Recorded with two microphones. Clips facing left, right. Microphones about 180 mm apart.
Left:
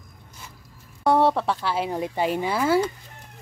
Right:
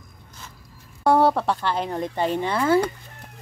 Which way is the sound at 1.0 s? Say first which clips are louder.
Right 1 dB; centre (ahead or behind).